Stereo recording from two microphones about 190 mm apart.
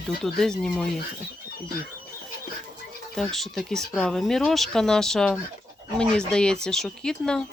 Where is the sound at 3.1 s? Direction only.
Centre (ahead or behind).